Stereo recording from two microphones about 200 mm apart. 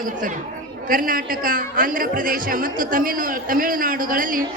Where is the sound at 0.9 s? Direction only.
45° right (ahead or behind).